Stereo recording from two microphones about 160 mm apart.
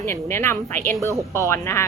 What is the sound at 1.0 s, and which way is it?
Speech, 20° right (ahead or behind).